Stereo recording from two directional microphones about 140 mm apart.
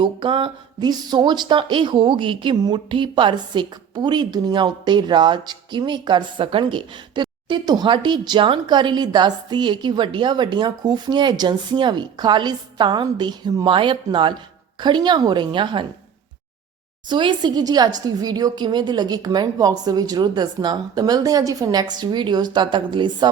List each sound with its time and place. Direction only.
0.0 s speech: 35° right (ahead or behind)
17.1 s a woman's voice: 35° right (ahead or behind)